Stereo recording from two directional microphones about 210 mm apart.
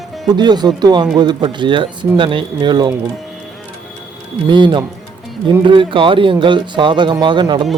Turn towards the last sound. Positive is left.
turn(degrees=-20)  # may be behind; listen again after turning